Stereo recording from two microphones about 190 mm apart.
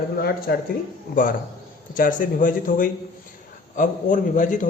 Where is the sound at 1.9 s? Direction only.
45° left (ahead or behind).